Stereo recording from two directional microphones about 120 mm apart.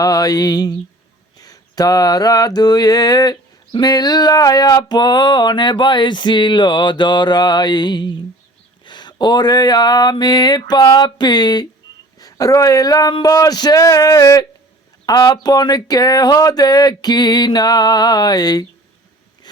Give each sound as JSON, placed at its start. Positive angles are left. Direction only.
{"t": 0.0, "sound": "mantra", "side_deg": 30}
{"t": 12.2, "sound": "speech", "side_deg": 30}
{"t": 15.0, "sound": "mantra", "side_deg": 35}